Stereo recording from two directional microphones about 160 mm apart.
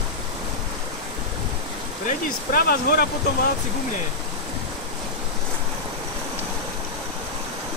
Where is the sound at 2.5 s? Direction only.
65° left (ahead or behind).